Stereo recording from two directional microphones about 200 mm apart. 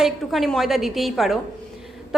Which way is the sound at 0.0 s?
Centre (ahead or behind).